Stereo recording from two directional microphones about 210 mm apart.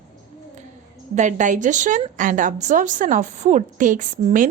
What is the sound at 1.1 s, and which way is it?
A woman's voice, 35° right (ahead or behind).